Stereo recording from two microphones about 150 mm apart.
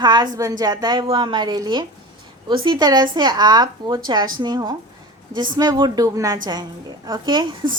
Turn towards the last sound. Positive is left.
turn(degrees=-30)  # may be behind; listen again after turning